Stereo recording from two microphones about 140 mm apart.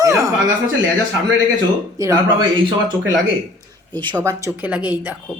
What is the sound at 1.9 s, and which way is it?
Speech, 25° right (ahead or behind).